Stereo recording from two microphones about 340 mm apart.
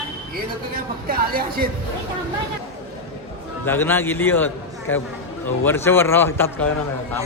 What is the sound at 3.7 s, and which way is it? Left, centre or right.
Speech, centre.